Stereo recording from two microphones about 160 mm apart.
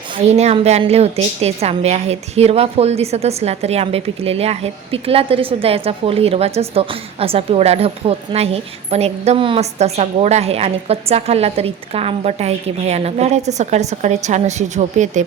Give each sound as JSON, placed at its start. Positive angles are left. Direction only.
{"t": 0.3, "sound": "a woman's voice", "side_deg": -40}